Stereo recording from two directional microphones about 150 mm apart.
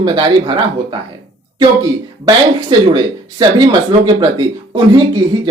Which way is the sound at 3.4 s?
25° right (ahead or behind).